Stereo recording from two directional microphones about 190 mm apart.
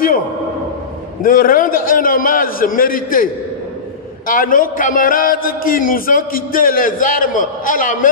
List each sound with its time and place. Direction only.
1.2 s a man's voice: 45° left (ahead or behind)
4.3 s a man's voice: 45° left (ahead or behind)